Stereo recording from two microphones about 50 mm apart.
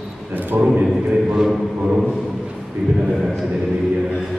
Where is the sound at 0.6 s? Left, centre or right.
Centre.